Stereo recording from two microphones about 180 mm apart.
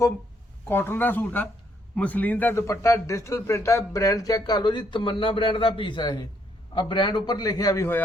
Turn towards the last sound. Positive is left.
turn(degrees=15)  # may be behind; listen again after turning